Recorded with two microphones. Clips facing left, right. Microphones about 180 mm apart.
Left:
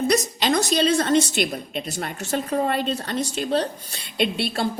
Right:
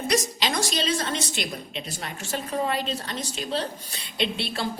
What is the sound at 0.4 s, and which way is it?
A woman's voice, 55° left (ahead or behind).